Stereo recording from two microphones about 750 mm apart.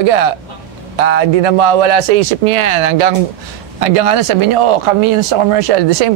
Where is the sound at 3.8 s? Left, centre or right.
Right.